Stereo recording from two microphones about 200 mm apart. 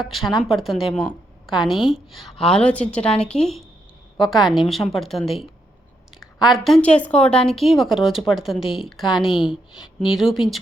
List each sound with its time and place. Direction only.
0.0 s a woman's voice: centre (ahead or behind)